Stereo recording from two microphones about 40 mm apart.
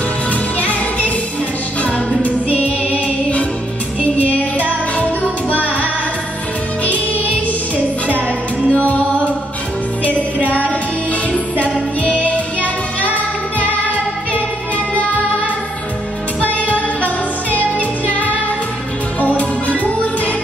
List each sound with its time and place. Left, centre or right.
0.3 s music: left
8.7 s music: left
12.0 s music: left
16.5 s music: left